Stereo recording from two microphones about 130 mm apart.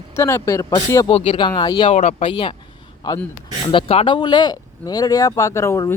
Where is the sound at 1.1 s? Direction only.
55° left (ahead or behind).